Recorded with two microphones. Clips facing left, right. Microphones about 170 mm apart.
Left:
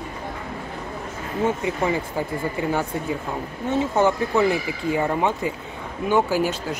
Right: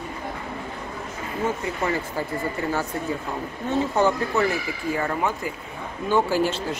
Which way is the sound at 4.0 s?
15° left (ahead or behind).